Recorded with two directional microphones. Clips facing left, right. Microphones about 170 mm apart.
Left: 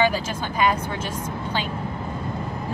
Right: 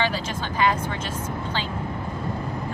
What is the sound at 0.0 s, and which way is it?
Speech, 10° left (ahead or behind).